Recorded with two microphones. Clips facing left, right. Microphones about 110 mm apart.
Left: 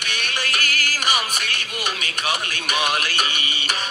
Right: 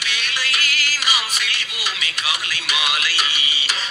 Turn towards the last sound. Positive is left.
turn(degrees=50)  # may be behind; listen again after turning